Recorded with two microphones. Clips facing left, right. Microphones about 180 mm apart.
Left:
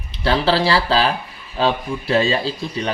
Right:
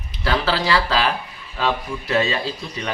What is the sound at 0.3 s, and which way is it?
A man's voice, 30° left (ahead or behind).